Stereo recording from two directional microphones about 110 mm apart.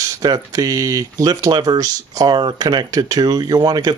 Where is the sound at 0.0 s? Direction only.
30° right (ahead or behind).